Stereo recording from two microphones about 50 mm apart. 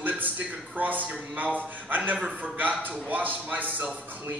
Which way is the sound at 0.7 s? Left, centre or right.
Right.